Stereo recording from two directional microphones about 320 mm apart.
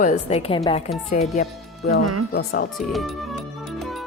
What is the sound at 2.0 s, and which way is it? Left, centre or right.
Speech, right.